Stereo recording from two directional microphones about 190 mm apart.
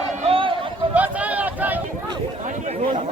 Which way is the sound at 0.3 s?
25° right (ahead or behind).